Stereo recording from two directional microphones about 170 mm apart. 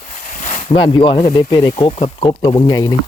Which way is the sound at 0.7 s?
30° left (ahead or behind).